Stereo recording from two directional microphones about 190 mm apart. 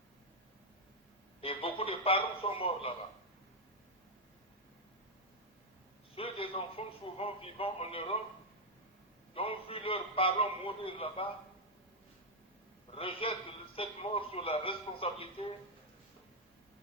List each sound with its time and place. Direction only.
1.4 s a sound: 30° left (ahead or behind)
6.1 s a man's voice: 30° left (ahead or behind)
9.3 s a man's voice: 30° left (ahead or behind)
12.9 s a man's voice: 30° left (ahead or behind)